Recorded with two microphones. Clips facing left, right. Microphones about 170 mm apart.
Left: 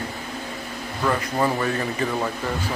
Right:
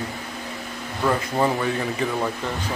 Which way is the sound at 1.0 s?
10° right (ahead or behind).